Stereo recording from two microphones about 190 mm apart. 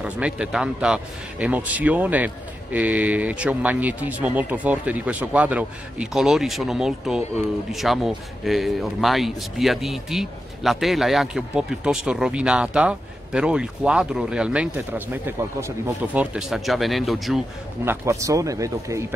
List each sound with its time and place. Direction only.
0.0 s a man's voice: 5° right (ahead or behind)
17.8 s a man's voice: 15° right (ahead or behind)